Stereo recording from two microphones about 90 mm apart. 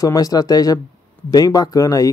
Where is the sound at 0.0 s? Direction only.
40° left (ahead or behind).